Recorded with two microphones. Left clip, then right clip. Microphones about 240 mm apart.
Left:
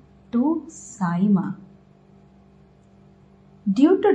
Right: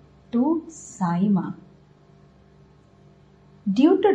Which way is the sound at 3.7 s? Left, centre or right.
Left.